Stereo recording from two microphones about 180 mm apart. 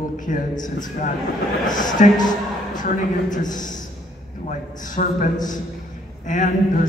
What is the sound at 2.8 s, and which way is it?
Speech, 45° left (ahead or behind).